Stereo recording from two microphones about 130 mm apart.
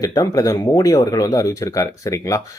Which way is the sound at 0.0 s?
25° left (ahead or behind).